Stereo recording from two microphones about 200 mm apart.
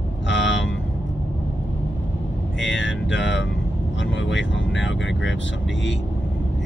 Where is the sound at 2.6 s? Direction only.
65° left (ahead or behind).